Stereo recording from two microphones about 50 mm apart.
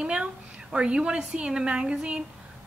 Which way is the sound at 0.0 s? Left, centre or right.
Centre.